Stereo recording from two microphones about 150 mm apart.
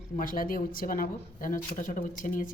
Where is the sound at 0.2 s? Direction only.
70° left (ahead or behind).